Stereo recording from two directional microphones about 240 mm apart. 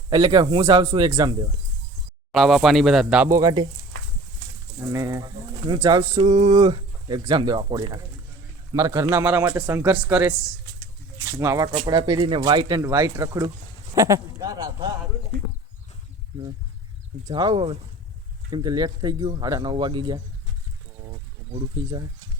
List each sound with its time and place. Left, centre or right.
0.1 s a man's voice: centre
2.3 s speech: centre
4.8 s a man's voice: centre
6.2 s speech: right
6.5 s a man's voice: centre
17.3 s a man's voice: centre
21.7 s speech: centre